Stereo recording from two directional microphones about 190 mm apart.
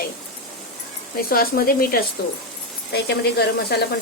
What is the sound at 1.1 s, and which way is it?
Speech, 50° left (ahead or behind).